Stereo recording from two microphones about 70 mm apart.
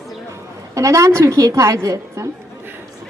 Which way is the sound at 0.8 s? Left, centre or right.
Right.